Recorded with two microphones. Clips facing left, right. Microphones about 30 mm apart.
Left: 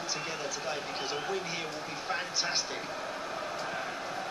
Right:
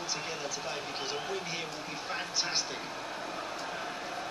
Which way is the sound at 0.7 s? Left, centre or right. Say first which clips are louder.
Left 3 dB; centre.